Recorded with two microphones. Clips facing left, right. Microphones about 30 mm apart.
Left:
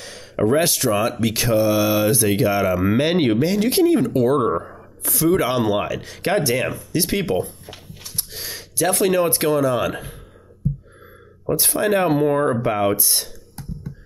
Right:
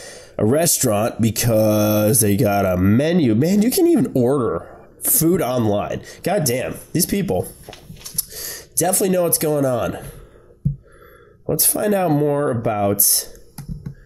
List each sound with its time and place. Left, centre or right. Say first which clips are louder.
0.0 s a sound: left 1 dB; left
0.4 s speech: right 1 dB; left
8.2 s typing: left 2 dB; left
8.9 s speech: left 1 dB; left
11.5 s speech: even; left